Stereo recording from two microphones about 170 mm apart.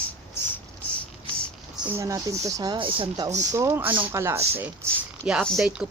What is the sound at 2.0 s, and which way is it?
Speech, 20° right (ahead or behind).